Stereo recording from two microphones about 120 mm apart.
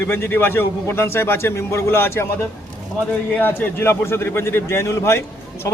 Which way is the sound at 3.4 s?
15° left (ahead or behind).